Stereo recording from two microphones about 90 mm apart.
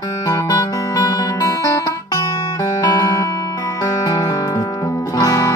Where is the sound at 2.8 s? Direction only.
40° left (ahead or behind).